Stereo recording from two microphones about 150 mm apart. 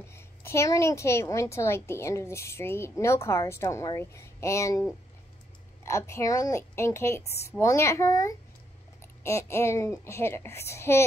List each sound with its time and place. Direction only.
0.1 s a woman's voice: 15° left (ahead or behind)
5.9 s a woman's voice: 20° left (ahead or behind)